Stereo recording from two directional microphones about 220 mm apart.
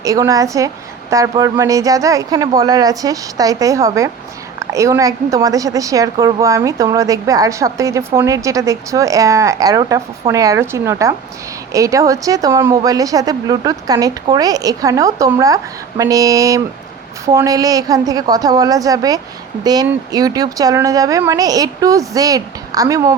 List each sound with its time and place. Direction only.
0.0 s a woman's voice: 15° right (ahead or behind)